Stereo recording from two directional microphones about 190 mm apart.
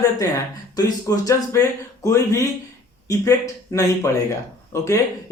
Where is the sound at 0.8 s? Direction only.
20° left (ahead or behind).